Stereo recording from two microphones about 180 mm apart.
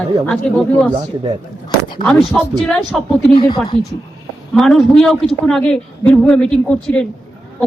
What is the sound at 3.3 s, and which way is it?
Speech, 25° left (ahead or behind).